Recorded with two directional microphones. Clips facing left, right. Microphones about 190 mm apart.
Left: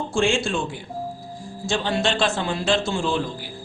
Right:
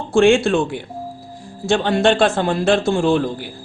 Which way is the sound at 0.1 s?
60° right (ahead or behind).